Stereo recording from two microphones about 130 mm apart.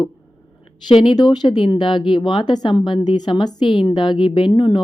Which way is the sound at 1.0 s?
35° left (ahead or behind).